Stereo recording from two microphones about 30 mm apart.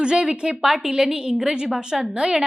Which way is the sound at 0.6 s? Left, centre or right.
Centre.